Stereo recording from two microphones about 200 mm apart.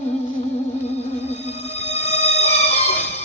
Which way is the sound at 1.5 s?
30° left (ahead or behind).